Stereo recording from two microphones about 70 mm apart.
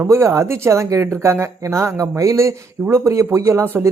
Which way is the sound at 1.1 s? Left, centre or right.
Right.